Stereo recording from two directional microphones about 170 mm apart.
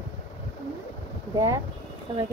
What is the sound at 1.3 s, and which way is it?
Speech, 20° right (ahead or behind).